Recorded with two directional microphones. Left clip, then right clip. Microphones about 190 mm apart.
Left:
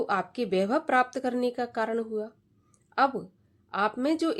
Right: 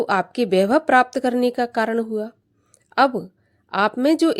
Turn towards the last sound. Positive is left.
turn(degrees=-40)  # may be behind; listen again after turning